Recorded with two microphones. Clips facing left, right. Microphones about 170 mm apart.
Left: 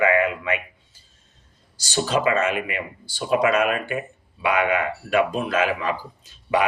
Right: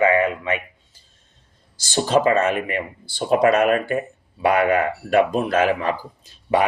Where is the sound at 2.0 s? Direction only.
40° right (ahead or behind).